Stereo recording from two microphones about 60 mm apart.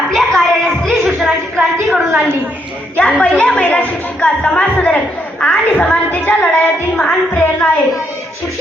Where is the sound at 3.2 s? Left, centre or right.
Left.